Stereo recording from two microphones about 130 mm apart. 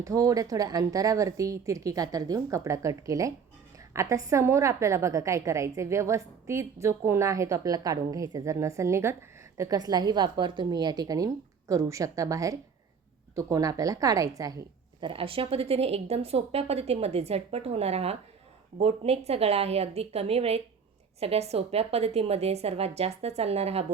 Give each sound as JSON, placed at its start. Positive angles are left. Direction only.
{"t": 0.0, "sound": "a woman's voice", "side_deg": -25}
{"t": 15.0, "sound": "speech", "side_deg": -45}